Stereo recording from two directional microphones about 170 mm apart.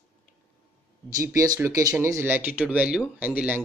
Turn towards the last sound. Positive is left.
turn(degrees=-10)  # may be behind; listen again after turning